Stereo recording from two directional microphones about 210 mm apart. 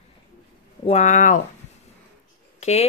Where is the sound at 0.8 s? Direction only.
35° left (ahead or behind).